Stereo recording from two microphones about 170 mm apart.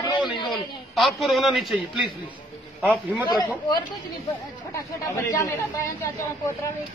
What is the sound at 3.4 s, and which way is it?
Speech, 25° left (ahead or behind).